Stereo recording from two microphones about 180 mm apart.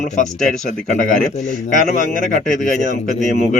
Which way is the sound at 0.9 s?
50° left (ahead or behind).